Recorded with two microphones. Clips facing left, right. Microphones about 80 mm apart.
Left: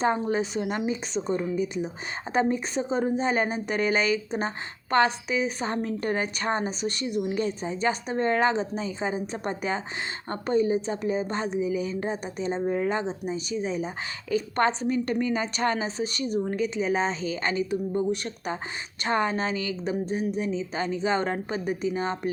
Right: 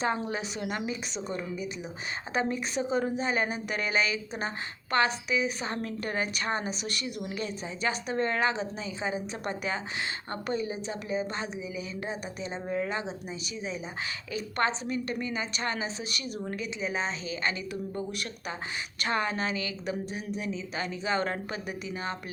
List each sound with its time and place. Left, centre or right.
0.0 s a woman's voice: left
7.3 s a woman's voice: left